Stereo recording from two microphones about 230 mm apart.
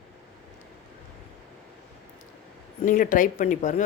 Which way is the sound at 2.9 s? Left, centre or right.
Left.